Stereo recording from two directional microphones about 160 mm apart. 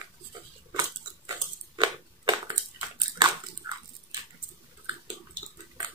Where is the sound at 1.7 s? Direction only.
25° right (ahead or behind).